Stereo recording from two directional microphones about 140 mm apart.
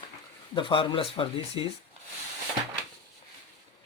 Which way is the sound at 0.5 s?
35° left (ahead or behind).